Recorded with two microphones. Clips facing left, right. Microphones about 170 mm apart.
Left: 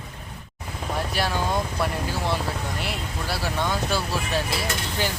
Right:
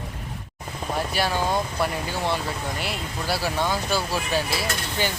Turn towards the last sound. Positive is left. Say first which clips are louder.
# even
turn(degrees=0)  # may be behind; listen again after turning